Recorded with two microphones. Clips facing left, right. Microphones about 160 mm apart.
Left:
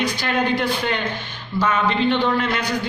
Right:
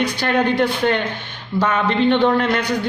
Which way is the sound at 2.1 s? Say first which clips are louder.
Right 4 dB; 55° right (ahead or behind).